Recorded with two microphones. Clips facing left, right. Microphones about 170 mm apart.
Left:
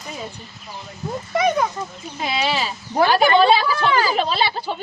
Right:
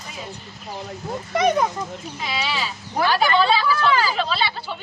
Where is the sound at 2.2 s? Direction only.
50° left (ahead or behind).